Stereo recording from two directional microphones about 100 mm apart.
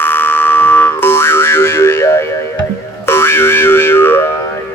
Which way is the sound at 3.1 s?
25° left (ahead or behind).